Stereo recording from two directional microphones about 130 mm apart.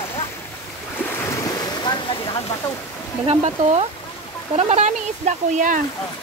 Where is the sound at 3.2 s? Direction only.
55° right (ahead or behind); by 5.8 s 75° right (ahead or behind).